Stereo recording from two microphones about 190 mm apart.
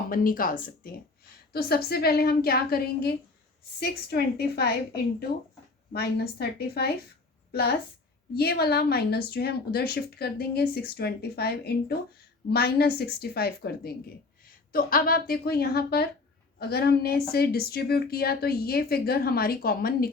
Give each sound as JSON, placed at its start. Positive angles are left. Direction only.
{"t": 0.1, "sound": "speech", "side_deg": 50}
{"t": 5.9, "sound": "a woman's voice", "side_deg": 55}